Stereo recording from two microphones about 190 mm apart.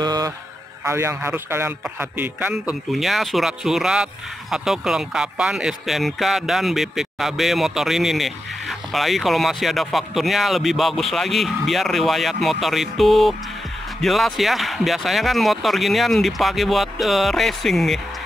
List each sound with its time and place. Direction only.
0.0 s mantra: 20° right (ahead or behind)
0.8 s a man's voice: 15° right (ahead or behind)